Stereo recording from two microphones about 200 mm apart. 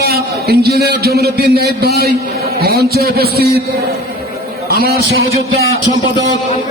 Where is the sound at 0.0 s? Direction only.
55° right (ahead or behind).